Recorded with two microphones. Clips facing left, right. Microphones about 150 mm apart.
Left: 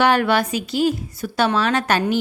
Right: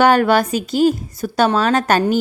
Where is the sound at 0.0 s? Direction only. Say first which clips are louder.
Right 4 dB; 45° right (ahead or behind).